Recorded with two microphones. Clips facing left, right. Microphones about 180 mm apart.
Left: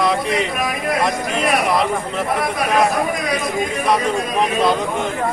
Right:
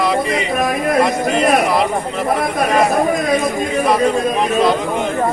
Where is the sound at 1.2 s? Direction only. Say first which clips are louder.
Right 5 dB; 45° right (ahead or behind).